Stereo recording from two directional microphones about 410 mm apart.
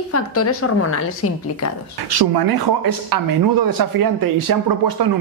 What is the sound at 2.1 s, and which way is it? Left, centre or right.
Speech, right.